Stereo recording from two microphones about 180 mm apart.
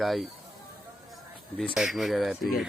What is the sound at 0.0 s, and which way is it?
Speech, centre (ahead or behind).